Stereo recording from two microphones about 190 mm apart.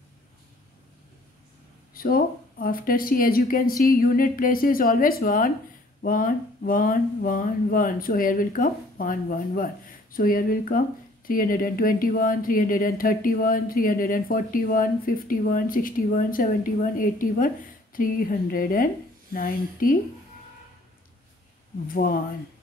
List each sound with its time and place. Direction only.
2.0 s speech: 50° left (ahead or behind)
21.8 s speech: 50° left (ahead or behind)